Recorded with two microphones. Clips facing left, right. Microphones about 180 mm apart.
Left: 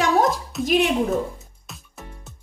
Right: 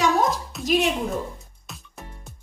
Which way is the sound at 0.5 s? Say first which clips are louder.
Left 6 dB; centre (ahead or behind).